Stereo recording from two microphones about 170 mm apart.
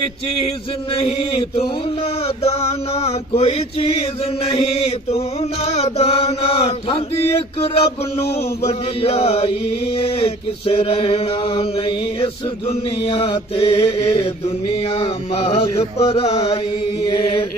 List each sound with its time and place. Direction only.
0.9 s chant: 35° left (ahead or behind)